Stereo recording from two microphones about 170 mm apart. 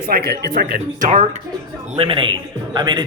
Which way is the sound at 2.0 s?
30° right (ahead or behind).